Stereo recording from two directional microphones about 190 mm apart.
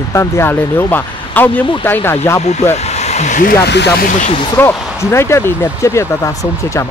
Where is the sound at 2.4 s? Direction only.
35° left (ahead or behind).